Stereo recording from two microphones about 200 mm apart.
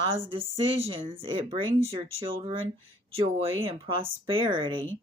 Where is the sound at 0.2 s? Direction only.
25° right (ahead or behind).